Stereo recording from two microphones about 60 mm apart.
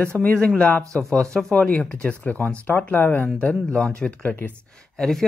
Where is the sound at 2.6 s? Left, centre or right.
Left.